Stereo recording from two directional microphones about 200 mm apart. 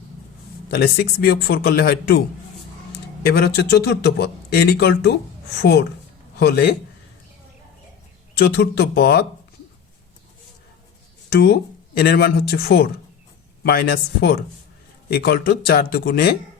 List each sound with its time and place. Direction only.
0.7 s speech: 50° left (ahead or behind)
3.2 s speech: 55° left (ahead or behind)
6.4 s speech: 55° left (ahead or behind)
8.4 s speech: 55° left (ahead or behind)
11.3 s speech: 55° left (ahead or behind)